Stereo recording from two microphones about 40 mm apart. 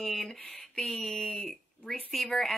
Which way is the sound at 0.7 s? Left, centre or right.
Centre.